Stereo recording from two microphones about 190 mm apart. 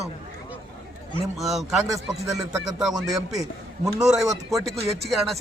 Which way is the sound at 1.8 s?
15° right (ahead or behind).